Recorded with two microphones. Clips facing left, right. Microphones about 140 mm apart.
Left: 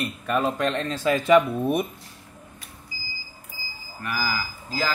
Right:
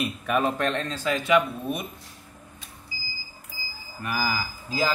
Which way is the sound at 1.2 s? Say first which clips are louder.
Left 5 dB; 50° left (ahead or behind).